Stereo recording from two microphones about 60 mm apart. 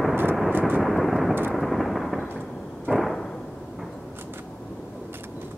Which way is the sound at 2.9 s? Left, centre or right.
Right.